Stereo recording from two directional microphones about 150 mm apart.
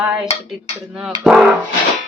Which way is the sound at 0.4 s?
5° right (ahead or behind).